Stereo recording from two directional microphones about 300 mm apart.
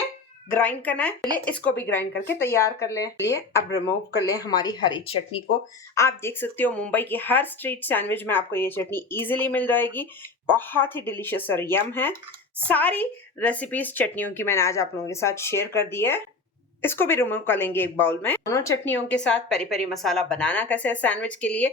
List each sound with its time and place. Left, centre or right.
0.5 s a woman's voice: centre